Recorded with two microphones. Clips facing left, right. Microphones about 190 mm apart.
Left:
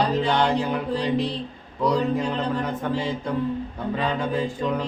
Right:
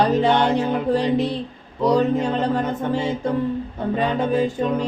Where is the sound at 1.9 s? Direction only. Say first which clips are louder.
Right 6 dB; 25° right (ahead or behind).